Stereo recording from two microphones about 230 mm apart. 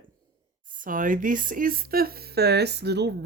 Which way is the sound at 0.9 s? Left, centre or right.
Right.